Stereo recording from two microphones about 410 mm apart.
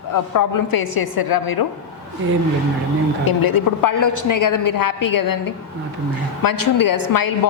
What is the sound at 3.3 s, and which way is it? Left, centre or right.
A woman's voice, left.